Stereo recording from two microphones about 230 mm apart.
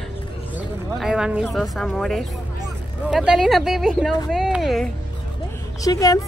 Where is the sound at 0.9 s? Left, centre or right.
Centre.